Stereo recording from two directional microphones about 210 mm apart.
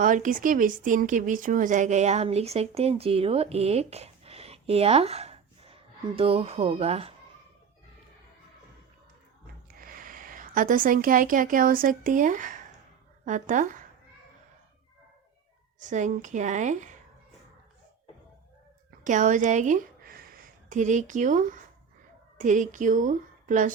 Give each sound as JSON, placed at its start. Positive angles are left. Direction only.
{"t": 0.0, "sound": "speech", "side_deg": -40}
{"t": 9.7, "sound": "speech", "side_deg": -40}
{"t": 15.8, "sound": "a woman's voice", "side_deg": -35}
{"t": 19.0, "sound": "a woman's voice", "side_deg": -35}